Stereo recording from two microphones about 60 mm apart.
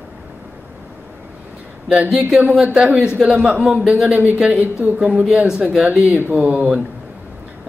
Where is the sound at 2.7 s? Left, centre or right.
Centre.